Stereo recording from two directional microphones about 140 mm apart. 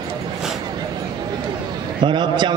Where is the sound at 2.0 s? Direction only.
35° right (ahead or behind).